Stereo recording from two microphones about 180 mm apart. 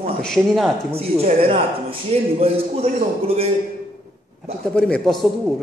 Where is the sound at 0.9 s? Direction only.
35° right (ahead or behind).